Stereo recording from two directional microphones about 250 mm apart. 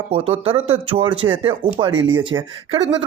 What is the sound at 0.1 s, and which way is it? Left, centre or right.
Speech, right.